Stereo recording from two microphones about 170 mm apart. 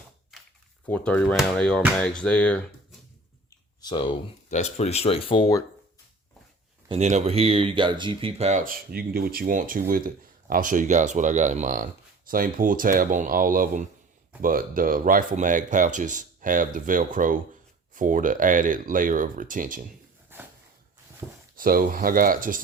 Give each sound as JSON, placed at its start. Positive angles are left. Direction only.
{"t": 0.9, "sound": "speech", "side_deg": 10}
{"t": 3.8, "sound": "speech", "side_deg": 25}
{"t": 4.4, "sound": "speech", "side_deg": 40}
{"t": 6.8, "sound": "speech", "side_deg": -40}
{"t": 20.3, "sound": "dog", "side_deg": -15}
{"t": 21.5, "sound": "speech", "side_deg": -60}